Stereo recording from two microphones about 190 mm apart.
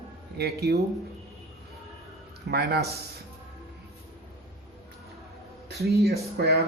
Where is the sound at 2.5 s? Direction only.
60° right (ahead or behind).